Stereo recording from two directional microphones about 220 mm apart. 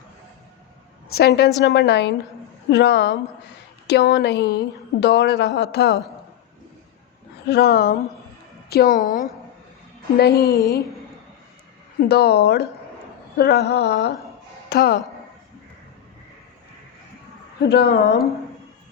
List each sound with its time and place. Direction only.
1.1 s a woman's voice: 45° left (ahead or behind)
7.4 s a woman's voice: 45° left (ahead or behind)
10.2 s a woman's voice: 45° left (ahead or behind)
10.4 s speech: 15° left (ahead or behind)
11.9 s a woman's voice: 45° left (ahead or behind)
17.6 s a woman's voice: 50° left (ahead or behind)